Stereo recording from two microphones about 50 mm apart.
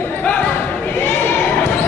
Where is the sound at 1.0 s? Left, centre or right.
Left.